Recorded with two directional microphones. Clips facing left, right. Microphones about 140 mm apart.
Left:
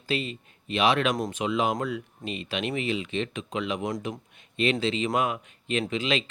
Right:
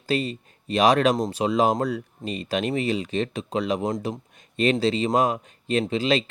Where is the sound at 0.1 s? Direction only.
40° right (ahead or behind).